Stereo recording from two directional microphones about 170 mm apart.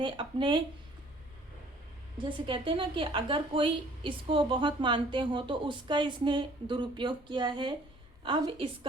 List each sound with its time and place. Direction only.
0.0 s a woman's voice: 30° right (ahead or behind)
2.1 s a woman's voice: 30° right (ahead or behind)